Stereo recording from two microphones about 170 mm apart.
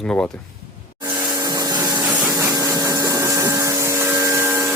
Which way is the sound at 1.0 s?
10° right (ahead or behind).